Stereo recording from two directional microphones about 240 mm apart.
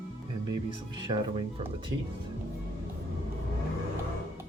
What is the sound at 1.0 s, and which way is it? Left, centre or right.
Speech, right.